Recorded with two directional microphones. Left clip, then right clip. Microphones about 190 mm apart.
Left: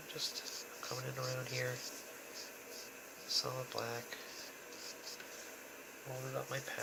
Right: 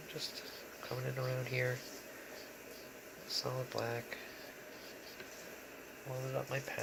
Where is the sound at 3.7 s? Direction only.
15° right (ahead or behind).